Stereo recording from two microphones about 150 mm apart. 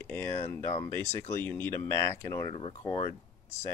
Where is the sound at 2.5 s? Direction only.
40° left (ahead or behind).